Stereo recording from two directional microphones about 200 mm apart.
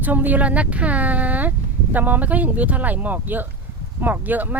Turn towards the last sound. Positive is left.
turn(degrees=-10)  # may be behind; listen again after turning